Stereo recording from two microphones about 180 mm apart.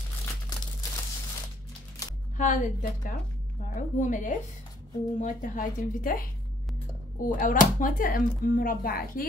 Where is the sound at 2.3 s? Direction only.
45° left (ahead or behind).